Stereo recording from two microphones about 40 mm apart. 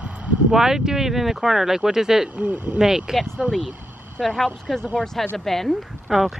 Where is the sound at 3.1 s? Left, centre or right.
Centre.